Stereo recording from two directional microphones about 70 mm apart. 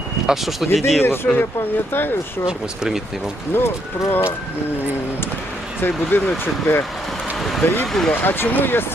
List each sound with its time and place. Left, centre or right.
0.3 s speech: centre
1.0 s speech: left
2.5 s speech: centre
3.5 s speech: left
5.8 s speech: left